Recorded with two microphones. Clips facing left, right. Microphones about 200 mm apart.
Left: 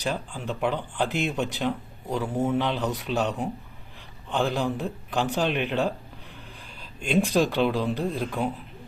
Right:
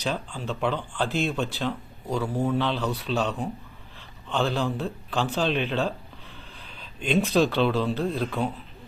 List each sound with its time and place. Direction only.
0.0 s speech: 15° left (ahead or behind)